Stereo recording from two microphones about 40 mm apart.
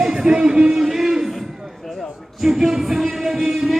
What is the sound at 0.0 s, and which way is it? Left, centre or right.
Speech, centre.